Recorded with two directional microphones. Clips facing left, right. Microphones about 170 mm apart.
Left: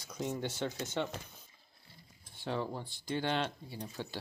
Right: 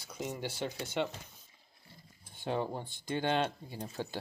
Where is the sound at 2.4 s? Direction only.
20° right (ahead or behind).